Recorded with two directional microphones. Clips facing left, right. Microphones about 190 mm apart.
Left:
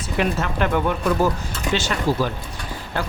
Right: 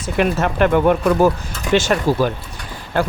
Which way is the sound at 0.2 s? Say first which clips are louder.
Right 6 dB; 55° right (ahead or behind).